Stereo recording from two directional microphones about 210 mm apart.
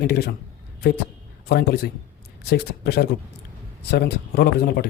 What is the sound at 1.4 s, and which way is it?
Speech, 50° left (ahead or behind).